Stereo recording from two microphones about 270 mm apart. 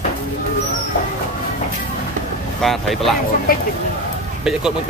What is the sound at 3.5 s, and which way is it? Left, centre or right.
Speech, left.